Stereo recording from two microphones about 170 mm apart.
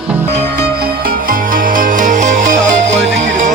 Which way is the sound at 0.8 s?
60° right (ahead or behind).